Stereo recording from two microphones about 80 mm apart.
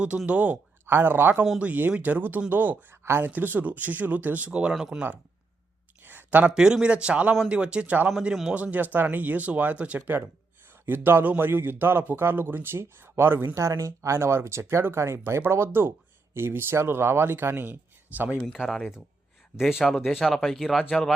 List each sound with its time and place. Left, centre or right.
0.3 s speech: centre
0.9 s speech: right; by 5.0 s centre
6.0 s a sound: right
6.5 s speech: centre
8.1 s speech: centre
8.5 s a man's voice: centre
18.4 s speech: centre